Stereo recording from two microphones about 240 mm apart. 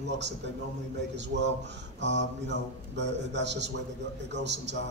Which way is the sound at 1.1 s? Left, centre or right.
Right.